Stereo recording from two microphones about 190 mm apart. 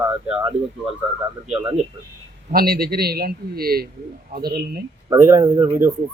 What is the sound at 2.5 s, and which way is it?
A man's voice, 50° right (ahead or behind).